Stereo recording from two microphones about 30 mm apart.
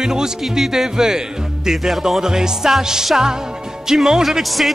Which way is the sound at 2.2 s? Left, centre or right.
Right.